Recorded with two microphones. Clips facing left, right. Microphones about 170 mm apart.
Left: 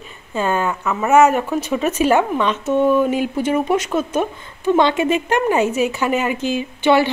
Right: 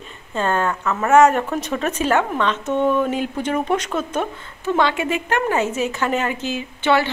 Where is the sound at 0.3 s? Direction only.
10° left (ahead or behind).